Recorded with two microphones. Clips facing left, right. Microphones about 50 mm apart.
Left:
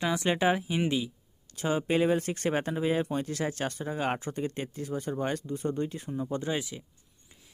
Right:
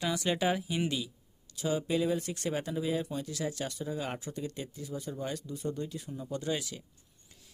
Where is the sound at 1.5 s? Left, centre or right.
Left.